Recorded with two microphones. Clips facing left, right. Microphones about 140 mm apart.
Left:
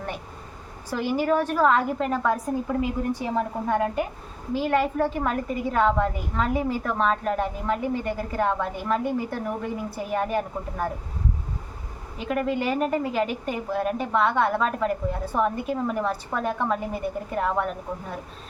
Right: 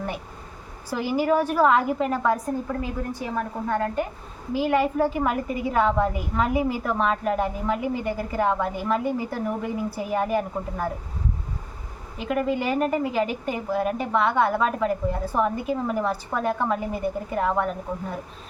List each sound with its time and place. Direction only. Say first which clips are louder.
0.9 s a woman's voice: right 1 dB; 5° right (ahead or behind)
3.1 s a woman's voice: left 3 dB; 25° left (ahead or behind)
4.5 s a woman's voice: right 1 dB; 5° right (ahead or behind)
12.1 s a woman's voice: right 1 dB; centre (ahead or behind)